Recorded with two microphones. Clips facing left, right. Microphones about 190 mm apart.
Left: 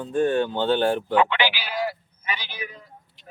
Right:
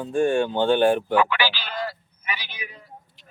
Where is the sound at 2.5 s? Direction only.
45° left (ahead or behind).